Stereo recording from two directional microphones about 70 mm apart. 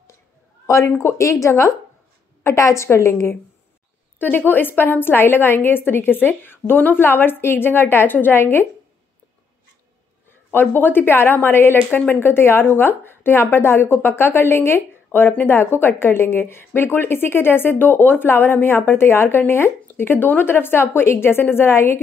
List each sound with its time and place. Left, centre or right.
0.7 s speech: left
4.2 s a woman's voice: left
10.5 s a woman's voice: left